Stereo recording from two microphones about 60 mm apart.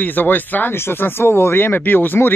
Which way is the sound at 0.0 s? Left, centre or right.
Left.